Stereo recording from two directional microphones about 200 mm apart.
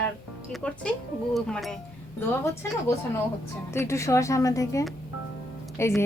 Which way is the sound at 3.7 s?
15° left (ahead or behind).